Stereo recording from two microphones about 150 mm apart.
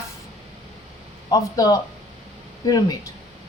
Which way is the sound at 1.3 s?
25° left (ahead or behind).